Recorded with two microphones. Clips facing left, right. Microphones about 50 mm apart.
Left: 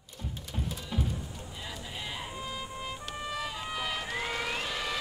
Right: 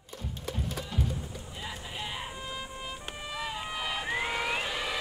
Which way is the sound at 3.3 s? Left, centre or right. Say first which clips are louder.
Right 2 dB; centre.